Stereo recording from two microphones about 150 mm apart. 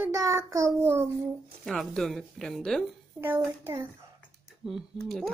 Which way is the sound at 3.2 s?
15° right (ahead or behind).